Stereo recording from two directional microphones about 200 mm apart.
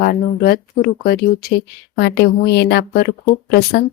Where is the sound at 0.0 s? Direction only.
50° left (ahead or behind).